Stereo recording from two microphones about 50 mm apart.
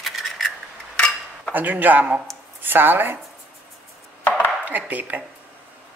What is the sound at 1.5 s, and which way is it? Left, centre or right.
Speech, right.